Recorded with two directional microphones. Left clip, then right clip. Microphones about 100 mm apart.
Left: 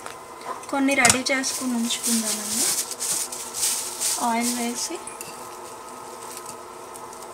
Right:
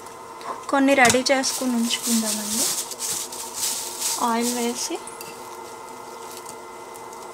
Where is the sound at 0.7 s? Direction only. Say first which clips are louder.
Right 3 dB; 50° right (ahead or behind).